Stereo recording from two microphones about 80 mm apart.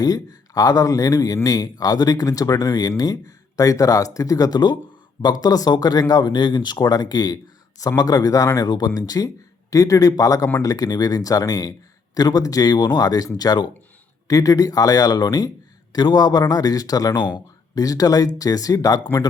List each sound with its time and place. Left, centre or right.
0.0 s speech: left
17.2 s speech: left
17.7 s speech: left